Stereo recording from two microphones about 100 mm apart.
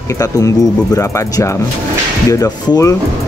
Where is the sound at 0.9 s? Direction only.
30° left (ahead or behind).